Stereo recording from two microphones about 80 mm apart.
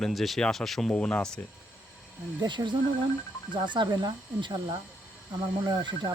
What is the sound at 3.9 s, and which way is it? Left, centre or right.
Speech, right.